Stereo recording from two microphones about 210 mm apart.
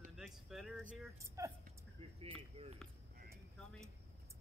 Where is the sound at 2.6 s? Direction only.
30° right (ahead or behind).